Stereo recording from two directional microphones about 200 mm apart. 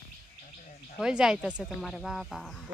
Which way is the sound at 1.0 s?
5° right (ahead or behind).